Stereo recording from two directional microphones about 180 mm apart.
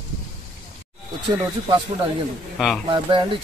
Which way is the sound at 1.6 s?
25° right (ahead or behind).